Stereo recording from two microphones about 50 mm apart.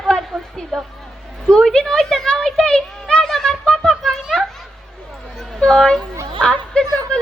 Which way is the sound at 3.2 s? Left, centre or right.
Centre.